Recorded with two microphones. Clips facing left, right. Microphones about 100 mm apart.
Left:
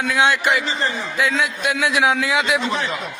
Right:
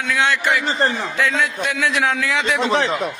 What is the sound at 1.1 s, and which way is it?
A man's voice, 10° left (ahead or behind).